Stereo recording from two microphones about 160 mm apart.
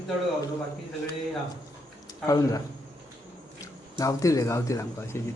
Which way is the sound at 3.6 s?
20° left (ahead or behind).